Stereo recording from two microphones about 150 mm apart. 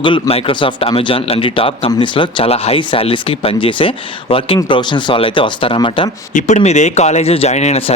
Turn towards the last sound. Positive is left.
turn(degrees=45)  # may be behind; listen again after turning